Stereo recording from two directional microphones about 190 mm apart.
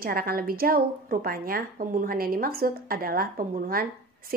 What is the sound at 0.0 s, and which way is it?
A woman's voice, 50° right (ahead or behind).